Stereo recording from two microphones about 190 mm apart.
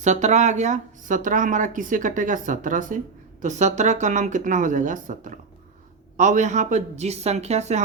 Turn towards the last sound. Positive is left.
turn(degrees=-35)  # may be behind; listen again after turning